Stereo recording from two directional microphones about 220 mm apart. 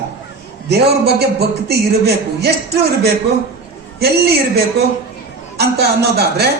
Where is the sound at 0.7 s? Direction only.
45° right (ahead or behind).